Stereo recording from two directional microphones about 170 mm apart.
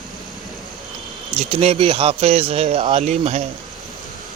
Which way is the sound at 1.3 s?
35° right (ahead or behind).